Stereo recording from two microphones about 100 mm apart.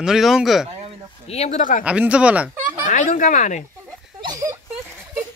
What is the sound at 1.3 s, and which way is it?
Speech, 90° left.